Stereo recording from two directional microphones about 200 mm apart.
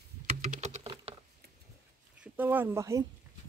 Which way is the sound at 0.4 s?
35° right (ahead or behind).